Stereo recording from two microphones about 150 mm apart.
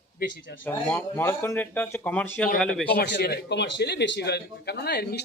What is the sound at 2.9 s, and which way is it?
A man's voice, 90° left.